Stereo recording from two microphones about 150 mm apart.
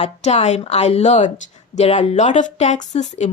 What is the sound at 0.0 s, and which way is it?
A woman's voice, 45° left (ahead or behind).